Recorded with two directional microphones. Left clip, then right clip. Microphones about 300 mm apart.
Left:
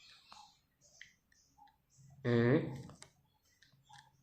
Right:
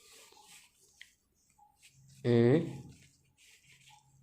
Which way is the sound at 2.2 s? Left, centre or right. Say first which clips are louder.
Right 5 dB; right.